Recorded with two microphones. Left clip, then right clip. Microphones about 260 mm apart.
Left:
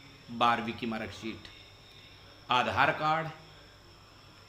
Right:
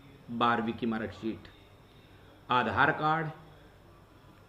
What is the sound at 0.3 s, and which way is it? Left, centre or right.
A man's voice, centre.